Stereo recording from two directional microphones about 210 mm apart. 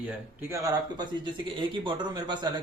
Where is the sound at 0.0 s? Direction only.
10° right (ahead or behind).